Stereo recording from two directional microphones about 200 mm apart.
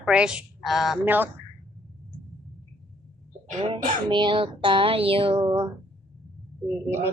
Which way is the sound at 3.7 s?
35° right (ahead or behind).